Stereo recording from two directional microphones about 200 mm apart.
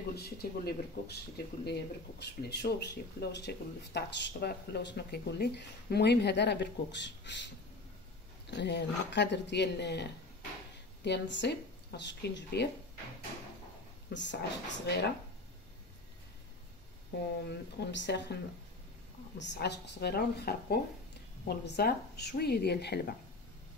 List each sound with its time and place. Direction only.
0.1 s a woman's voice: 50° left (ahead or behind)
11.1 s speech: 60° left (ahead or behind)
14.1 s speech: 65° left (ahead or behind)
17.5 s a woman's voice: 60° left (ahead or behind)